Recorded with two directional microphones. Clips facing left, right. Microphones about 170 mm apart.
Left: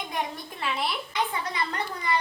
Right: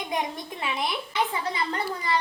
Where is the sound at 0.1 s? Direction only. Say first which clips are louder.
Right 5 dB; 15° right (ahead or behind).